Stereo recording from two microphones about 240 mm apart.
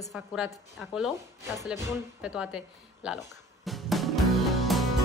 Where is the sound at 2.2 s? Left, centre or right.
Centre.